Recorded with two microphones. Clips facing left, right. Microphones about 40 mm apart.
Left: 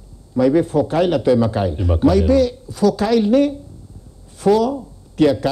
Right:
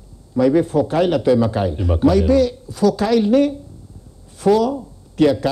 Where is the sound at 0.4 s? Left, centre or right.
Centre.